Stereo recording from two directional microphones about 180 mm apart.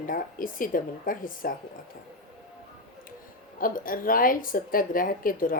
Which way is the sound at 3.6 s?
50° left (ahead or behind).